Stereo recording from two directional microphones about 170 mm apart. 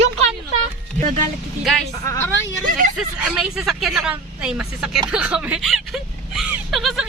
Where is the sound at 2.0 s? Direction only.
15° left (ahead or behind).